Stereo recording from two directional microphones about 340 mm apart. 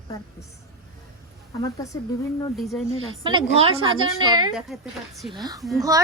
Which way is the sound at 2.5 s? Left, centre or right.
Centre.